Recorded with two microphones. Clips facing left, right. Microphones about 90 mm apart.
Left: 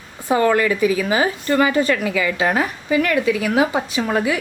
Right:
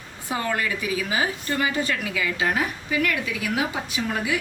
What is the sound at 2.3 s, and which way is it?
Speech, 50° left (ahead or behind).